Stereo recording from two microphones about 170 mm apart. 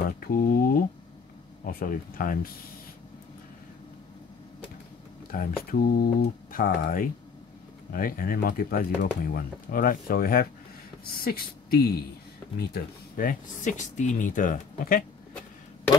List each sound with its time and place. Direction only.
0.2 s speech: 55° left (ahead or behind)
5.3 s speech: 60° left (ahead or behind)